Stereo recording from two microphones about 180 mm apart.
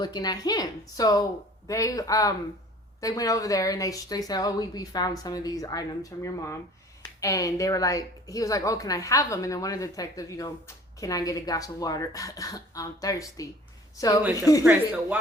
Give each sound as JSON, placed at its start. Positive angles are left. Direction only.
{"t": 0.0, "sound": "a woman's voice", "side_deg": 20}
{"t": 14.6, "sound": "speech", "side_deg": -5}